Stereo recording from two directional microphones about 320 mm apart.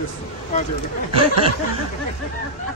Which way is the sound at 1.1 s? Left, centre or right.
Centre.